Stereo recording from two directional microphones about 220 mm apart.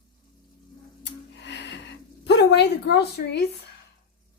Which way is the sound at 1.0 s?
50° left (ahead or behind).